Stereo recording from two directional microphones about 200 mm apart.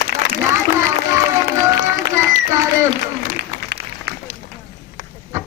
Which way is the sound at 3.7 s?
55° right (ahead or behind).